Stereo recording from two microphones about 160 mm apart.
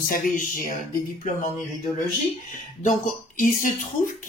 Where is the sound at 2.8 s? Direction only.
55° left (ahead or behind).